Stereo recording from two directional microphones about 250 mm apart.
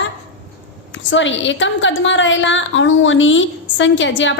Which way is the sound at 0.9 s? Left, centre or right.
Left.